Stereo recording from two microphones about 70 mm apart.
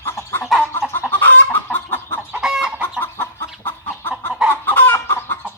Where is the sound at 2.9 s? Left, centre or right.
Left.